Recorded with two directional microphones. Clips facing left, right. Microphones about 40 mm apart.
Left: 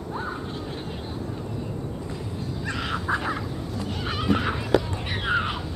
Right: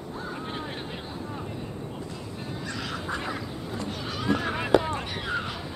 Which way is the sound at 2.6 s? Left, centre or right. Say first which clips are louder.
Left 6 dB; left.